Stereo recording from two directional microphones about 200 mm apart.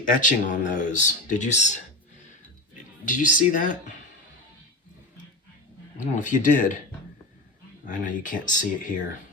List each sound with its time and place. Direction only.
0.1 s speech: 40° left (ahead or behind)
3.1 s speech: 40° left (ahead or behind)
6.0 s speech: 40° left (ahead or behind)
7.9 s speech: 40° left (ahead or behind)